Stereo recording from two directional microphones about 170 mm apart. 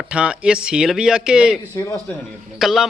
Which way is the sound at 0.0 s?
5° right (ahead or behind).